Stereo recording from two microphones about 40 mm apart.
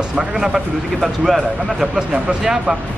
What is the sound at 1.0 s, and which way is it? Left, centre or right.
Speech, centre.